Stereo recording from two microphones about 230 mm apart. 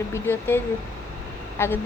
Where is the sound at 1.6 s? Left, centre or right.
Centre.